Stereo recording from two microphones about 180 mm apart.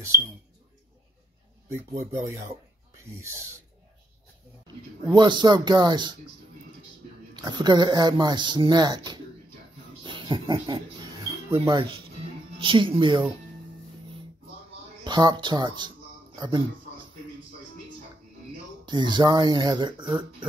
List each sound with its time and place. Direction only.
2.1 s filing: 15° right (ahead or behind)
5.0 s speech: 25° right (ahead or behind)
7.3 s speech: 25° right (ahead or behind)
15.0 s speech: 25° right (ahead or behind)
18.9 s speech: 25° right (ahead or behind)